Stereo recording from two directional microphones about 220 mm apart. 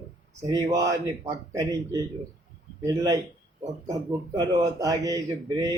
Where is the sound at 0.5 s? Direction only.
15° right (ahead or behind).